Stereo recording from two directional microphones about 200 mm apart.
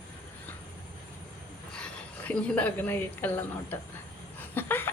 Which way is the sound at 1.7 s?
5° left (ahead or behind).